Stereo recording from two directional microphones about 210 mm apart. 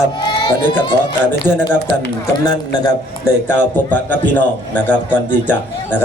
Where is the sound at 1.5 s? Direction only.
20° right (ahead or behind).